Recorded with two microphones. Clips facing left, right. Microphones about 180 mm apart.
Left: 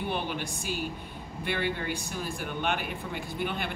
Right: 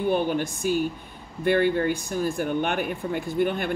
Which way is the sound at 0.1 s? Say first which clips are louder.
Right 9 dB; 45° right (ahead or behind).